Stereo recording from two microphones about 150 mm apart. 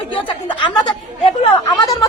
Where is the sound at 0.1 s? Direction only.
30° left (ahead or behind).